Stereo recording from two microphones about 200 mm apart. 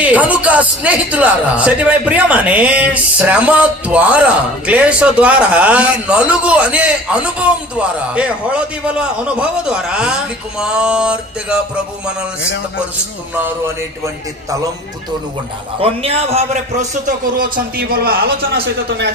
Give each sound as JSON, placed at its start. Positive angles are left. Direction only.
{"t": 0.0, "sound": "a man's voice", "side_deg": -5}
{"t": 15.8, "sound": "a man's voice", "side_deg": -30}